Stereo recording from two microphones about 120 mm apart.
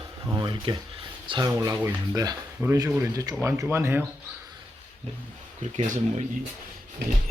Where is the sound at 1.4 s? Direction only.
25° right (ahead or behind).